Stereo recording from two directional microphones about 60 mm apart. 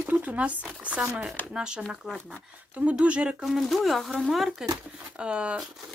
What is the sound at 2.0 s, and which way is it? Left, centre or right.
Speech, centre.